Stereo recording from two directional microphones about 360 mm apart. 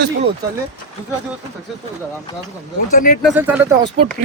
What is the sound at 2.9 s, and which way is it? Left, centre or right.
Speech, left.